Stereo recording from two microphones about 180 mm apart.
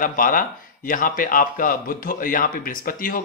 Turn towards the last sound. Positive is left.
turn(degrees=55)  # may be behind; listen again after turning